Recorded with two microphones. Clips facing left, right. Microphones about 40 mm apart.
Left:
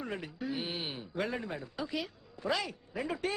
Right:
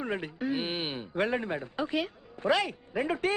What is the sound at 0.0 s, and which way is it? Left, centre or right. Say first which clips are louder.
Speech: right 6 dB; right.